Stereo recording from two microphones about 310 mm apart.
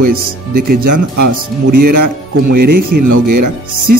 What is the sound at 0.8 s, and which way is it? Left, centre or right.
Speech, right.